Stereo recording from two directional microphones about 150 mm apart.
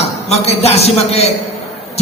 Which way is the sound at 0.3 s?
45° left (ahead or behind).